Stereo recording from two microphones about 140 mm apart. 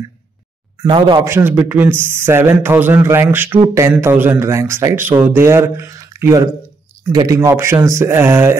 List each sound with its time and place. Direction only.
0.8 s speech: 30° right (ahead or behind)
1.2 s speech: 15° right (ahead or behind)